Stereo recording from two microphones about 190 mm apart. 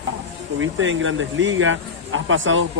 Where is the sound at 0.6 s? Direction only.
90° right.